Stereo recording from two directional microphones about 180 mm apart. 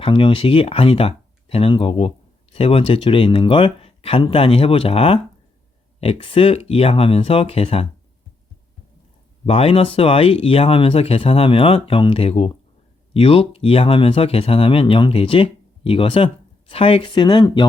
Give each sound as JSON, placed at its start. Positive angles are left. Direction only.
{"t": 0.0, "sound": "speech", "side_deg": 30}
{"t": 9.5, "sound": "speech", "side_deg": 30}